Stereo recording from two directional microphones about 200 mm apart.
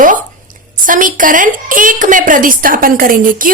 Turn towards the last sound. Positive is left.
turn(degrees=-45)  # may be behind; listen again after turning